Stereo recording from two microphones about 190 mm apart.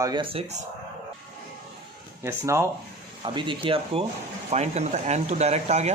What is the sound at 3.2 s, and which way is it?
Speech, 25° right (ahead or behind).